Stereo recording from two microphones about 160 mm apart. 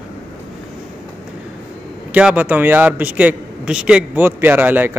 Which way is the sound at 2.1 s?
10° right (ahead or behind).